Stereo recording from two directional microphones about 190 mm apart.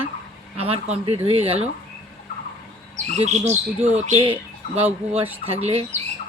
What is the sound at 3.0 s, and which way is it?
A woman's voice, 35° right (ahead or behind).